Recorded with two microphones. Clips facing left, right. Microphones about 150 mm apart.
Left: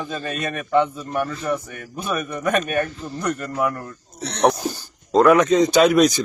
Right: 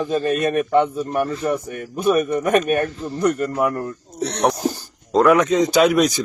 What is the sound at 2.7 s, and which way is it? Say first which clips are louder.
Speech: right 3 dB; 40° right (ahead or behind).